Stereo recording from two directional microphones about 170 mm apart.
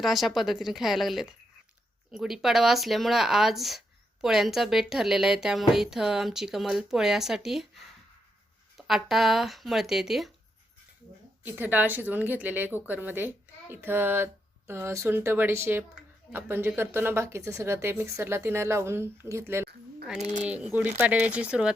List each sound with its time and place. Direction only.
0.0 s speech: centre (ahead or behind)
8.9 s speech: centre (ahead or behind)
11.4 s a woman's voice: 10° right (ahead or behind)
20.1 s speech: 40° right (ahead or behind)
20.4 s a woman's voice: 5° right (ahead or behind)